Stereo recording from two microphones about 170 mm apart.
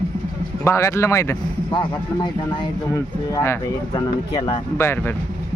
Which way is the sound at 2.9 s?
15° left (ahead or behind).